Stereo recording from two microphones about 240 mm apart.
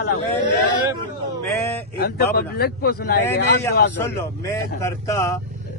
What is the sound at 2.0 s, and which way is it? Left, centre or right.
A man's voice, left.